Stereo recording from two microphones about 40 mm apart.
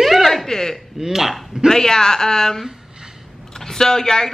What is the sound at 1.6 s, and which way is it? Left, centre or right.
Speech, centre.